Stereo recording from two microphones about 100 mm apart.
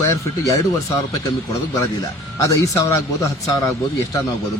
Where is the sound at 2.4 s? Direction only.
30° left (ahead or behind).